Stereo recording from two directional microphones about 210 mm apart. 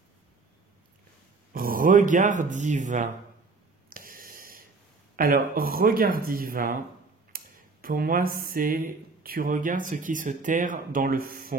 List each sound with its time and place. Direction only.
1.5 s speech: 45° right (ahead or behind)
3.9 s a sound: 40° right (ahead or behind)
5.1 s speech: 40° right (ahead or behind)